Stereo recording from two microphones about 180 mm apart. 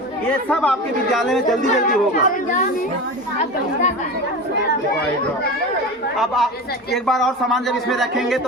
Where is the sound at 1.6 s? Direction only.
50° left (ahead or behind).